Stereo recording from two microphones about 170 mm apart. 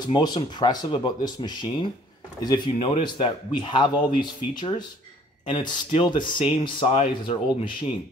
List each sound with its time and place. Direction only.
0.0 s speech: 25° left (ahead or behind)